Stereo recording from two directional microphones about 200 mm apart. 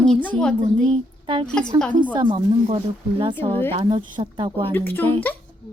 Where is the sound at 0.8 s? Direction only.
25° right (ahead or behind).